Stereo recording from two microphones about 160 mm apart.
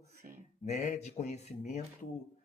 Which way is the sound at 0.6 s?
45° left (ahead or behind).